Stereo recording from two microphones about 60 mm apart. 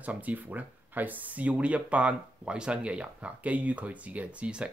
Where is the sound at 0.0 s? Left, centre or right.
Right.